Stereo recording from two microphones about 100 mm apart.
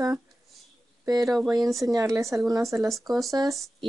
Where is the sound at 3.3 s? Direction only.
35° right (ahead or behind).